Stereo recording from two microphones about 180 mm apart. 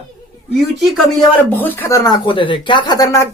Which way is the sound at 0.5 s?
Centre (ahead or behind).